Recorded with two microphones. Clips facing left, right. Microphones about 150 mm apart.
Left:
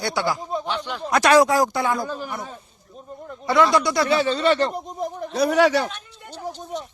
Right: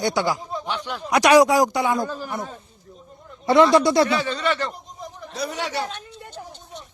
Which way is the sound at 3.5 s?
25° right (ahead or behind).